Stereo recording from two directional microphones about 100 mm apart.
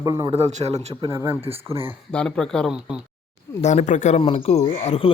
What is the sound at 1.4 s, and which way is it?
Speech, 80° right.